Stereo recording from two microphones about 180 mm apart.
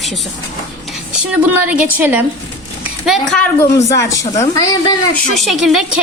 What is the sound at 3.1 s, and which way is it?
Speech, 5° left (ahead or behind).